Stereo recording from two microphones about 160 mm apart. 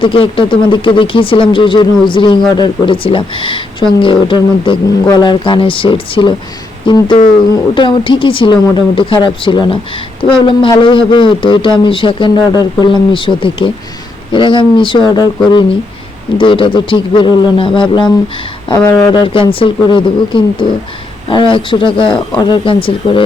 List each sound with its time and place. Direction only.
0.0 s a man's voice: 35° left (ahead or behind)
18.8 s speech: 15° left (ahead or behind)
19.1 s a man's voice: 30° left (ahead or behind)